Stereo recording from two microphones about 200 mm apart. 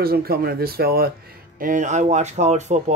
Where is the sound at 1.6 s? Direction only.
40° right (ahead or behind).